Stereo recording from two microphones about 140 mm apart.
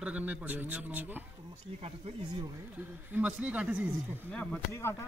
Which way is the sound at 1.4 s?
40° right (ahead or behind).